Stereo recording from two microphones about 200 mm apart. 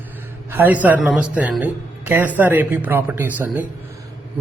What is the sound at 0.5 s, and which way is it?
Speech, 10° right (ahead or behind).